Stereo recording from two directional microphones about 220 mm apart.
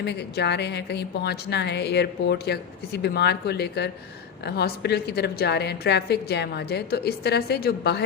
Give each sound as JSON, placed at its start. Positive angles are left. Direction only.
{"t": 0.0, "sound": "a woman's voice", "side_deg": 50}